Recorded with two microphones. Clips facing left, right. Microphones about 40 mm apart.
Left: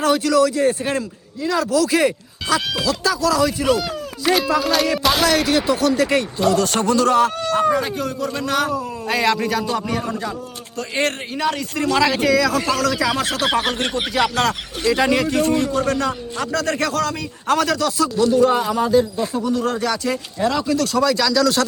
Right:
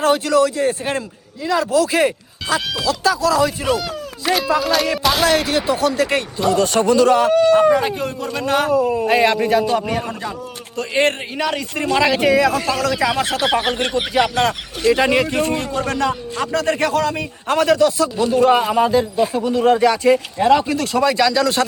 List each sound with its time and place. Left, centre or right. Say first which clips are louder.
0.0 s speech: right 1 dB; right
3.7 s speech: left 1 dB; centre
5.3 s a man's voice: even; right
6.0 s a man's voice: left 1 dB; right
12.5 s speech: even; centre
12.8 s a man's voice: right 1 dB; right
13.4 s speech: even; centre
15.0 s a man's voice: right 1 dB; right